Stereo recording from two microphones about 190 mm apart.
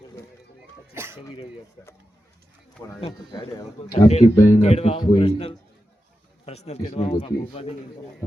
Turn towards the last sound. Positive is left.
turn(degrees=30)  # may be behind; listen again after turning